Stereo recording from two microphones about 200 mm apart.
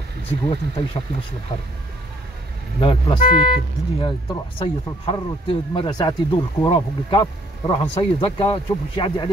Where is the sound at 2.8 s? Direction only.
25° left (ahead or behind).